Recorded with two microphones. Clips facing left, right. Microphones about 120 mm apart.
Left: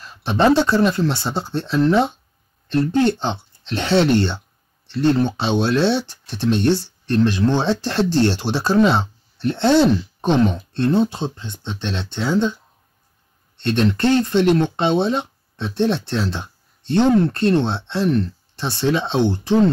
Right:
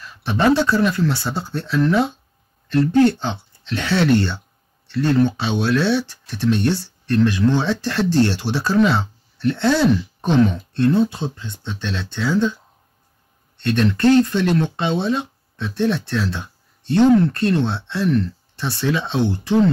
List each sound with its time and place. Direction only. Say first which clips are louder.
0.0 s speech: left 1 dB; 30° left (ahead or behind)
13.6 s speech: even; 25° left (ahead or behind)